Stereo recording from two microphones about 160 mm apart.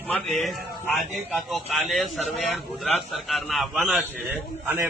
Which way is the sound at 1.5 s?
Centre (ahead or behind).